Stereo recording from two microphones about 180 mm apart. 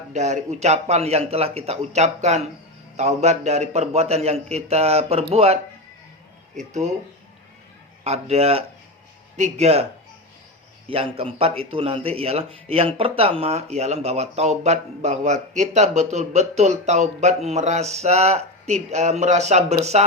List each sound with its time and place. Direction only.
0.1 s speech: 40° right (ahead or behind)
6.6 s speech: 40° right (ahead or behind)
8.0 s speech: 35° right (ahead or behind)
10.8 s speech: 30° right (ahead or behind)